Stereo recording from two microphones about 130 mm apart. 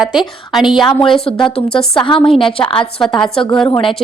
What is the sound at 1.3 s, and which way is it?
A woman's voice, 40° left (ahead or behind).